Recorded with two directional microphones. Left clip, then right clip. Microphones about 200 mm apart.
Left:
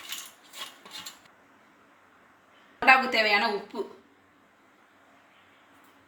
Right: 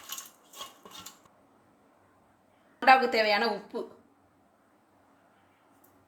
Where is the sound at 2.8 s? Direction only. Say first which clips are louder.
Left 1 dB; 40° right (ahead or behind).